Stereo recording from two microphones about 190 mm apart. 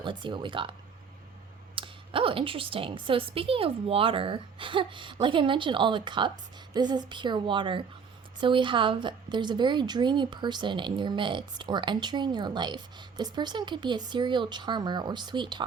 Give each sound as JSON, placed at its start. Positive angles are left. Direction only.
{"t": 0.0, "sound": "a woman's voice", "side_deg": -25}